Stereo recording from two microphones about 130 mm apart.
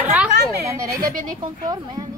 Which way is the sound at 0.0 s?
10° right (ahead or behind).